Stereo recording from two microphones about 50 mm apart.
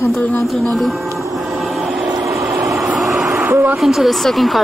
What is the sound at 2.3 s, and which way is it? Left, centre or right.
Vehicle, right.